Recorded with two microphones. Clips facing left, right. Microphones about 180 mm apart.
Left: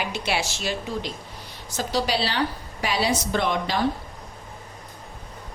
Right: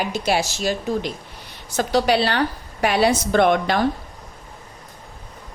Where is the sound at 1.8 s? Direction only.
60° right (ahead or behind).